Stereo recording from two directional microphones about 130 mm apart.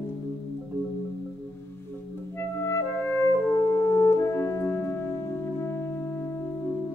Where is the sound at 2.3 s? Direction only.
20° left (ahead or behind).